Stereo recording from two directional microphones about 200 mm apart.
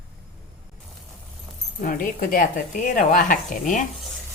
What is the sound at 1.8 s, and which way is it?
Speech, 45° left (ahead or behind).